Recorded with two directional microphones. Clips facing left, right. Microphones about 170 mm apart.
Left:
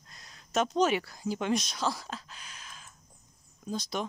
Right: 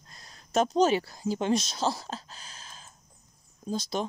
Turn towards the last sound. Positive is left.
turn(degrees=-30)  # may be behind; listen again after turning